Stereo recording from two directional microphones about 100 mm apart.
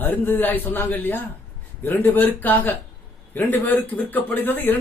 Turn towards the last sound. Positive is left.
turn(degrees=20)  # may be behind; listen again after turning